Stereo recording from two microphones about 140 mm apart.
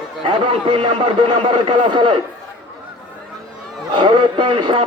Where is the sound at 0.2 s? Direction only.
35° right (ahead or behind).